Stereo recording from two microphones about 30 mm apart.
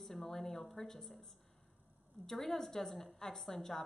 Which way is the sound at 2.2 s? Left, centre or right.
Centre.